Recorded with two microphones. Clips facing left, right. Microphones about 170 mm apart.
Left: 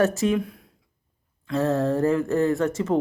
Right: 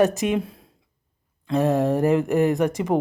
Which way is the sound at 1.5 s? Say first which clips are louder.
Right 2 dB; 15° right (ahead or behind).